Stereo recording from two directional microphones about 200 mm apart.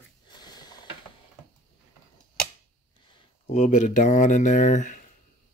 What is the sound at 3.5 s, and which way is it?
Speech, 35° left (ahead or behind).